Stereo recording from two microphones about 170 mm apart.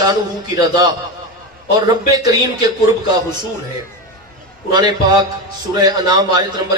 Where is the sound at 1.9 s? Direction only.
25° right (ahead or behind).